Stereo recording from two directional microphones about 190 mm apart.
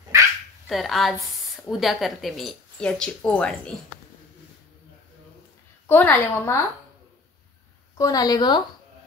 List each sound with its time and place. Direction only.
0.7 s a woman's voice: centre (ahead or behind)
5.9 s a woman's voice: 10° left (ahead or behind)
8.0 s a woman's voice: 20° left (ahead or behind)